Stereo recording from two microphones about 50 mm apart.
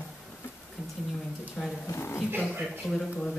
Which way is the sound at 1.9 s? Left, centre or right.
Left.